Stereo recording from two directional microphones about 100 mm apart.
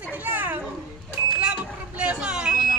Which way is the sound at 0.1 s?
20° right (ahead or behind).